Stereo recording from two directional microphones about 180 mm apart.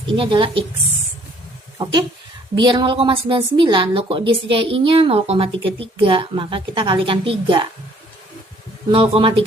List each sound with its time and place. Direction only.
0.1 s a woman's voice: 25° right (ahead or behind)
2.6 s a woman's voice: 25° right (ahead or behind)
8.9 s a woman's voice: 30° right (ahead or behind)